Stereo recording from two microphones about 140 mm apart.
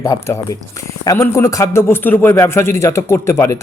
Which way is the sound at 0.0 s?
25° left (ahead or behind).